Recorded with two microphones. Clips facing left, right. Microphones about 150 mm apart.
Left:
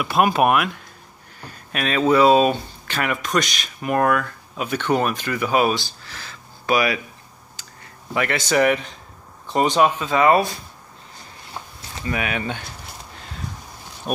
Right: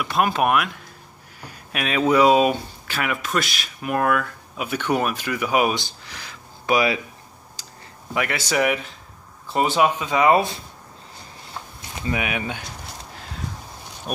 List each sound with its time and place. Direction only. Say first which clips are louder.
0.0 s speech: left 3 dB; 10° left (ahead or behind)
1.4 s speech: left 2 dB; 10° right (ahead or behind)
7.6 s a sound: even; 35° right (ahead or behind)
8.1 s speech: left 3 dB; 10° right (ahead or behind)
11.9 s speech: even; 15° right (ahead or behind)
14.1 s speech: left 4 dB; centre (ahead or behind)